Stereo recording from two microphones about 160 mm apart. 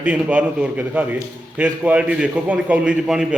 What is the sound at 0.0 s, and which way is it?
A man's voice, 10° right (ahead or behind).